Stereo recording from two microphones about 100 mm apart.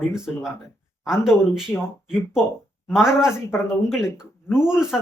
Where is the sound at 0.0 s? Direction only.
5° right (ahead or behind).